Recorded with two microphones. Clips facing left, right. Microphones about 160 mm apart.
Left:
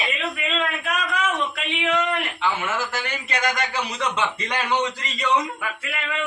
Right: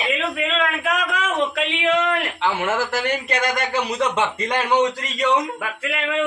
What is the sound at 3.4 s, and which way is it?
A man's voice, 50° right (ahead or behind).